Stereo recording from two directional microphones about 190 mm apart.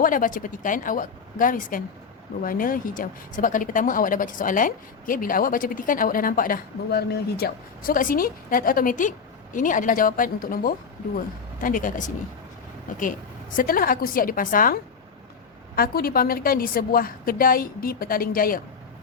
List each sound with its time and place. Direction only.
0.0 s a woman's voice: 45° left (ahead or behind)